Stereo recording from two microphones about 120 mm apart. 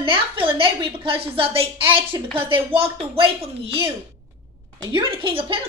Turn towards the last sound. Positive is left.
turn(degrees=-50)  # may be behind; listen again after turning